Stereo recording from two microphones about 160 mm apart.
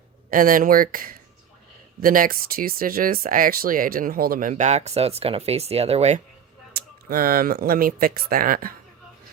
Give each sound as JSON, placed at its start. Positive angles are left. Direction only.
{"t": 0.3, "sound": "speech", "side_deg": -60}
{"t": 7.1, "sound": "speech", "side_deg": -65}